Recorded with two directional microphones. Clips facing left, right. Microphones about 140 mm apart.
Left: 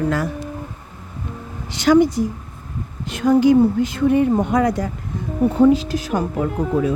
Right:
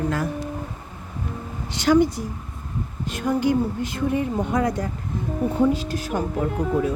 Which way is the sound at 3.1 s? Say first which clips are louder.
Left 8 dB; 90° left.